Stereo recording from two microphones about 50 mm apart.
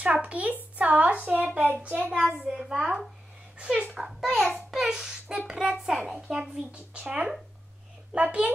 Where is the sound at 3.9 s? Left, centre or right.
Centre.